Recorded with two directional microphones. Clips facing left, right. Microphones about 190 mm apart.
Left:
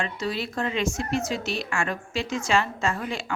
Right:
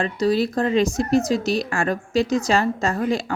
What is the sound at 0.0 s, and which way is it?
Speech, 40° right (ahead or behind).